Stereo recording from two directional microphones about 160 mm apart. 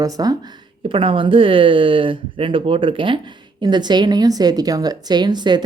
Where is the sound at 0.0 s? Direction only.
25° right (ahead or behind).